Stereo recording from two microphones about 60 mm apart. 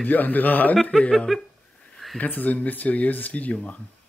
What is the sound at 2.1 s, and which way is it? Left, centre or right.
A man's voice, left.